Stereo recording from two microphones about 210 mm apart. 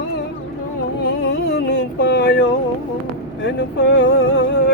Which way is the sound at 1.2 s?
55° left (ahead or behind).